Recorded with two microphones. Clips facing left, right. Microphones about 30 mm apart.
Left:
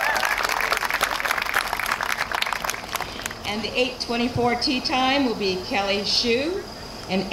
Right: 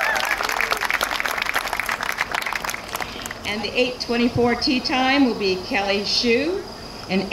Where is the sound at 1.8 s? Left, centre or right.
Right.